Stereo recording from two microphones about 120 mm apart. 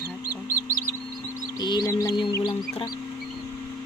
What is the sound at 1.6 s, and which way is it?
Chicken, 35° left (ahead or behind).